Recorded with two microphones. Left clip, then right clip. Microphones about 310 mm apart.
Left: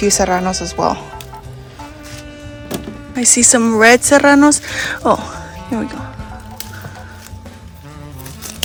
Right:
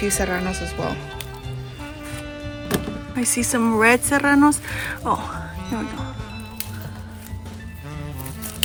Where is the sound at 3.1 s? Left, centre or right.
Centre.